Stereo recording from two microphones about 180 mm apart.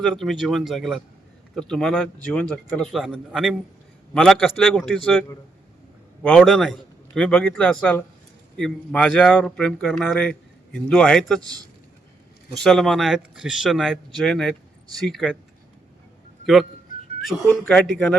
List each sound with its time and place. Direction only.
0.0 s a man's voice: 5° left (ahead or behind)
6.2 s a man's voice: 5° left (ahead or behind)
12.5 s a man's voice: 5° left (ahead or behind)
17.6 s a man's voice: 5° left (ahead or behind)